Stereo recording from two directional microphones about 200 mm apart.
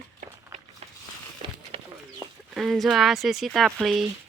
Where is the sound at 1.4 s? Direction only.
25° right (ahead or behind).